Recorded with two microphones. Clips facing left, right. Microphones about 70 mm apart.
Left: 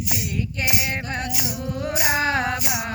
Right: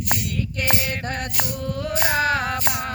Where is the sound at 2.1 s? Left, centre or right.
Left.